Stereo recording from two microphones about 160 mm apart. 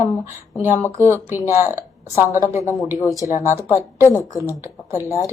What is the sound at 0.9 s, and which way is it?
Speech, 15° right (ahead or behind).